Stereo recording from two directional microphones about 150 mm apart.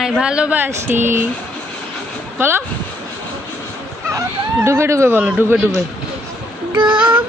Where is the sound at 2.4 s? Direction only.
15° right (ahead or behind).